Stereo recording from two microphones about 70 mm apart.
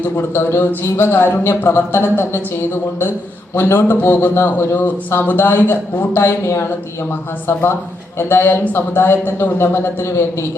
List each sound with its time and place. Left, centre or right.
0.2 s speech: left